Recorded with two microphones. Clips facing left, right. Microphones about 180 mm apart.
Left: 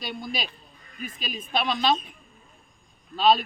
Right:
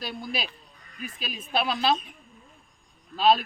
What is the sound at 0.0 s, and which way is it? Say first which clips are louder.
Speech: even; 5° right (ahead or behind).